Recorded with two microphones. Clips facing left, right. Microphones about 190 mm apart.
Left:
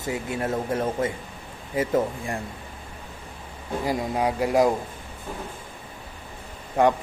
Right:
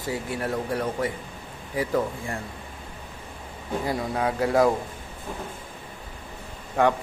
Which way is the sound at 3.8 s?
15° left (ahead or behind).